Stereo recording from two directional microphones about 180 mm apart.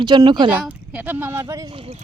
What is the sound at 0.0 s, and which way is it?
Speech, 25° right (ahead or behind).